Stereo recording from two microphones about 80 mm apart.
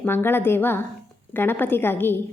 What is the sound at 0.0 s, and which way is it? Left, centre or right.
A woman's voice, left.